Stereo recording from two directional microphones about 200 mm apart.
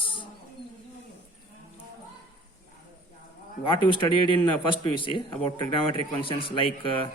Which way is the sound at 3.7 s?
25° left (ahead or behind).